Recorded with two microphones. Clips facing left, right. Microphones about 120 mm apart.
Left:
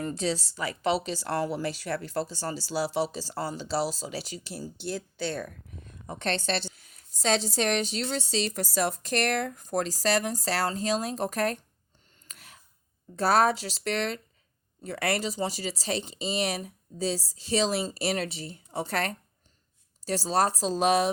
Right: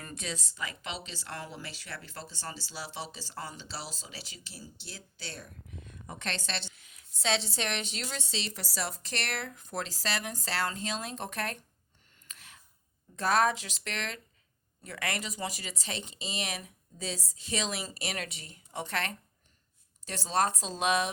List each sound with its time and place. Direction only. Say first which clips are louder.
0.0 s a woman's voice: left 11 dB; 30° left (ahead or behind); by 5.5 s 55° left (ahead or behind)
5.8 s a woman's voice: left 7 dB; 35° left (ahead or behind)
12.3 s a sound: left 2 dB; 40° left (ahead or behind)
13.1 s a woman's voice: left 4 dB; 40° left (ahead or behind)